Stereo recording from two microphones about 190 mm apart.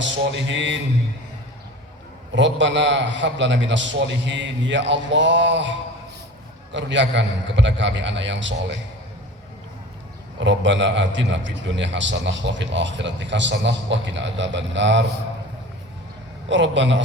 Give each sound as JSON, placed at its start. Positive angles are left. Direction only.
{"t": 0.0, "sound": "a man's voice", "side_deg": -75}
{"t": 2.3, "sound": "a man's voice", "side_deg": -75}
{"t": 6.7, "sound": "a man's voice", "side_deg": -70}
{"t": 10.4, "sound": "a man's voice", "side_deg": -75}
{"t": 16.5, "sound": "a man's voice", "side_deg": -75}